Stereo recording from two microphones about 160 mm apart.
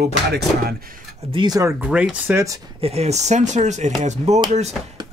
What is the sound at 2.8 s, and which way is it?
Speech, 40° right (ahead or behind).